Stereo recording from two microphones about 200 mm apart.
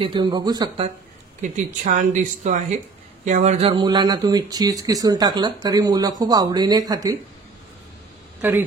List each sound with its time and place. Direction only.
0.0 s speech: 20° right (ahead or behind)
1.4 s speech: 35° right (ahead or behind); by 7.2 s 20° right (ahead or behind)
8.4 s speech: 10° right (ahead or behind)